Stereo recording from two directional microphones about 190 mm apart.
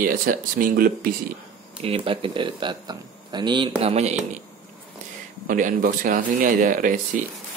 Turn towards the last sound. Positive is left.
turn(degrees=-45)  # may be behind; listen again after turning